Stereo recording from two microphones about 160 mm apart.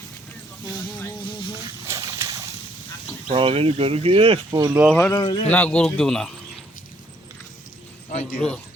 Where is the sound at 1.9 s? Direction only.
15° right (ahead or behind).